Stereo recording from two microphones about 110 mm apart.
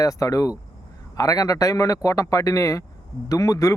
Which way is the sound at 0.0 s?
30° left (ahead or behind).